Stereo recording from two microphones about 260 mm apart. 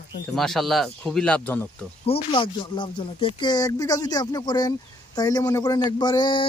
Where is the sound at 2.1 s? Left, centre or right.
Centre.